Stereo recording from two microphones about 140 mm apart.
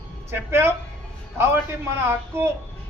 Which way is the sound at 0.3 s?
15° right (ahead or behind).